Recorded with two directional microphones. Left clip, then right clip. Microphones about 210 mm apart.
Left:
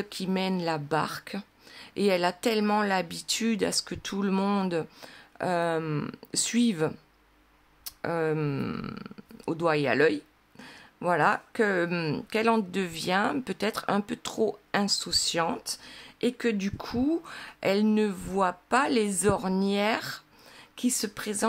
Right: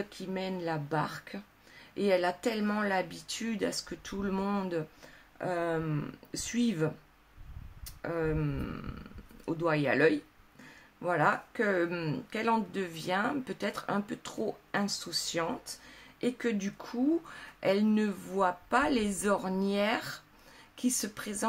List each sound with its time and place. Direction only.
0.1 s speech: 45° left (ahead or behind)